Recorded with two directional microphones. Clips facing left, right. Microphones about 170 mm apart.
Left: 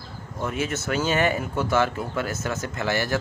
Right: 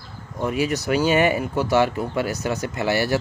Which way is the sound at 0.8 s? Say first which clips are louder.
Right 4 dB; 15° right (ahead or behind).